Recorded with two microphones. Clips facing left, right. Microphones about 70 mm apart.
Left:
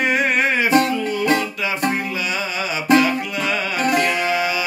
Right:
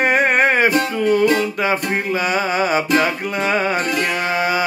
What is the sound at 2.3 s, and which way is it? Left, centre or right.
Music, right.